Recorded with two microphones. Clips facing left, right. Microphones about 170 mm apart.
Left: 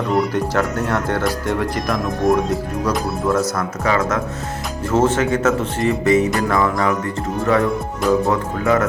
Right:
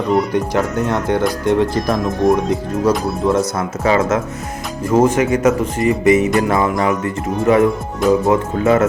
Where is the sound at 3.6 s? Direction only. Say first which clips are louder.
Right 3 dB; 25° right (ahead or behind).